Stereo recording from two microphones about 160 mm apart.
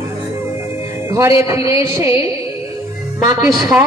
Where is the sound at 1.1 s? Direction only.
20° right (ahead or behind).